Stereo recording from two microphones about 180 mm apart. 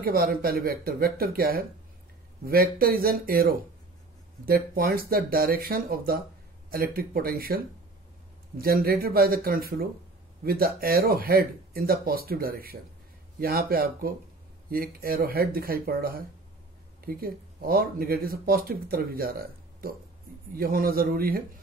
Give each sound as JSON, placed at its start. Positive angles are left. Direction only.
{"t": 0.0, "sound": "a man's voice", "side_deg": -55}